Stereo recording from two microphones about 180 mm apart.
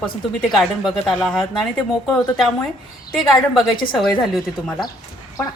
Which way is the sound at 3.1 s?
Centre (ahead or behind).